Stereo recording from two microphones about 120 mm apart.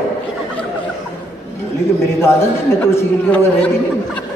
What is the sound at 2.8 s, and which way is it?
Speech, 20° left (ahead or behind).